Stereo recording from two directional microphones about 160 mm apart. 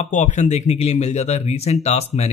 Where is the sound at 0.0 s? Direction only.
50° left (ahead or behind).